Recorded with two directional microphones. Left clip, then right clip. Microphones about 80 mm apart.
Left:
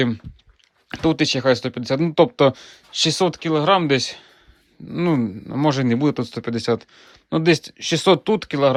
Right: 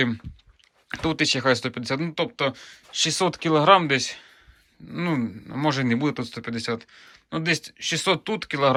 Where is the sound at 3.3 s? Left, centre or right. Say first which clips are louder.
Even; centre.